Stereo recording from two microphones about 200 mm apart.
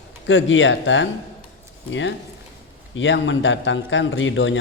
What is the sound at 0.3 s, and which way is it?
A man's voice, 70° left (ahead or behind).